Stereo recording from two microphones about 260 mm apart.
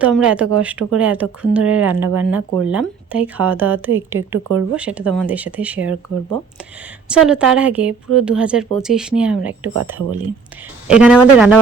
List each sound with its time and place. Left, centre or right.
0.0 s speech: centre
4.1 s speech: right
4.5 s speech: centre
7.1 s speech: centre
10.8 s speech: centre